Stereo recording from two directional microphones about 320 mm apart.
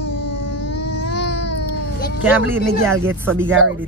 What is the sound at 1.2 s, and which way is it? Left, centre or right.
Baby cry, left.